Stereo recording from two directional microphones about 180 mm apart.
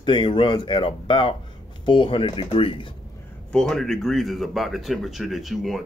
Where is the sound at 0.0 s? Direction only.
25° left (ahead or behind).